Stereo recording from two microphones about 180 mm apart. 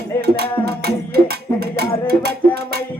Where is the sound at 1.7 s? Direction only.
60° right (ahead or behind).